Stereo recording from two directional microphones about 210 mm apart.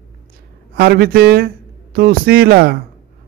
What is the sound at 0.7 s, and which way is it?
A man's voice, 45° right (ahead or behind).